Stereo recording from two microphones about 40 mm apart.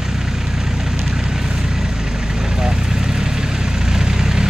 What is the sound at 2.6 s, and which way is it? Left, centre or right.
Vehicle, centre.